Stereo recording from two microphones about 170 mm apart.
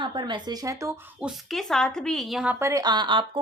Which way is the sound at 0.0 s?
30° right (ahead or behind).